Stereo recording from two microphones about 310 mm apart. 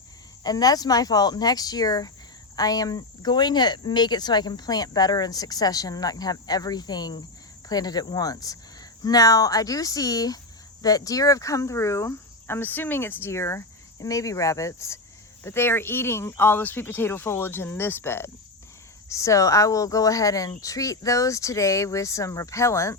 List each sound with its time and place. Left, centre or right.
0.4 s cricket: centre